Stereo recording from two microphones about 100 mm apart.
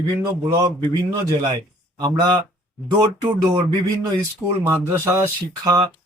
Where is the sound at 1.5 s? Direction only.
45° right (ahead or behind).